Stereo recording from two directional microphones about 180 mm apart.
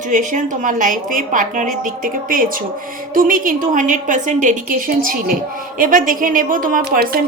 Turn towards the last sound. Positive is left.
turn(degrees=-60)  # may be behind; listen again after turning